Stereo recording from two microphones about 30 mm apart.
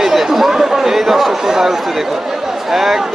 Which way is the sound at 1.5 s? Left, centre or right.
Centre.